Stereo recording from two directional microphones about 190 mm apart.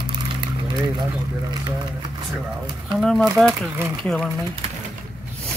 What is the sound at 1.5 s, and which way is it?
Speech, 20° right (ahead or behind).